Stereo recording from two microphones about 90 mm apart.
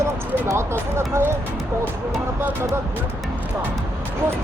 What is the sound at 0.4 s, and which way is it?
Speech, 30° right (ahead or behind).